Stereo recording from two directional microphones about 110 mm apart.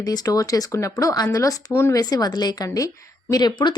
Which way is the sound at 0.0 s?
35° left (ahead or behind).